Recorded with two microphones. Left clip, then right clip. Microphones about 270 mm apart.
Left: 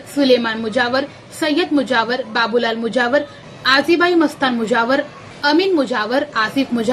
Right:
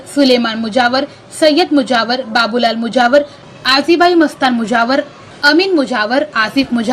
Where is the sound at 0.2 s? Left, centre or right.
Centre.